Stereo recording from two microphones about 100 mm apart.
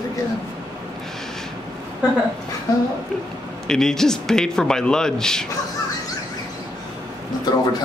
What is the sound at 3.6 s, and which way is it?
A man's voice, 5° left (ahead or behind).